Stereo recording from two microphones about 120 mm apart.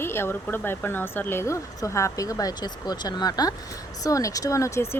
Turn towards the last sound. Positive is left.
turn(degrees=25)  # may be behind; listen again after turning